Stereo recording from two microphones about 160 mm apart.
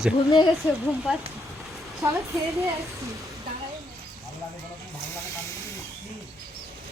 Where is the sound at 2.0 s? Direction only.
20° right (ahead or behind).